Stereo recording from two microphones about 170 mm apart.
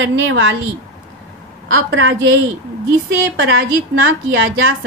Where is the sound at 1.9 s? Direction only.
90° right.